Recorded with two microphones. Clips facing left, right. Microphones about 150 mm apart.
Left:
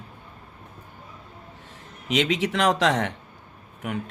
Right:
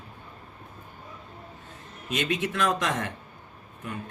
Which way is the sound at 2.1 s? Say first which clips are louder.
Left 5 dB; 75° left (ahead or behind).